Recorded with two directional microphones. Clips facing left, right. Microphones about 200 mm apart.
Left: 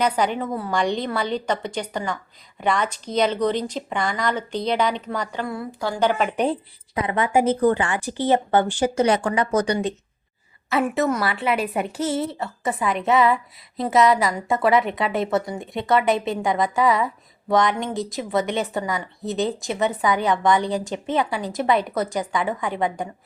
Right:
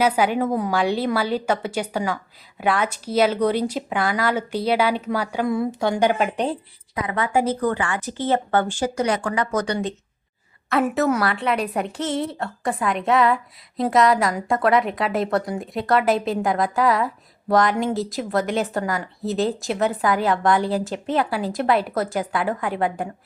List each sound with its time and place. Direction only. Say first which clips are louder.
0.0 s a woman's voice: right 3 dB; 5° right (ahead or behind)
6.9 s speech: left 2 dB; 25° left (ahead or behind)
10.7 s a woman's voice: right 1 dB; centre (ahead or behind)